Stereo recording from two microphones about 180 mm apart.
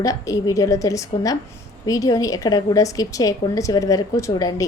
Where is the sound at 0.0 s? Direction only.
20° left (ahead or behind).